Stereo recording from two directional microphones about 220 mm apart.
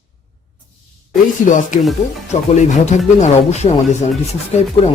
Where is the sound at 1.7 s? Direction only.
35° left (ahead or behind).